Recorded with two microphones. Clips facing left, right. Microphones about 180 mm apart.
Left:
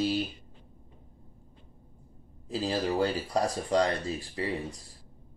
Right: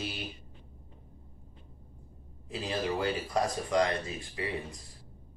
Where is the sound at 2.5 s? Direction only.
30° left (ahead or behind).